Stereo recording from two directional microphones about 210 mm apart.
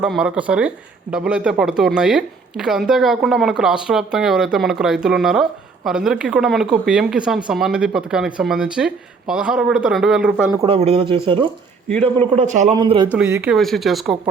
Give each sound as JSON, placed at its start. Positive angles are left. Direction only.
{"t": 0.0, "sound": "speech", "side_deg": -5}
{"t": 10.6, "sound": "speech", "side_deg": -25}
{"t": 12.7, "sound": "speech", "side_deg": -20}
{"t": 13.1, "sound": "speech", "side_deg": -5}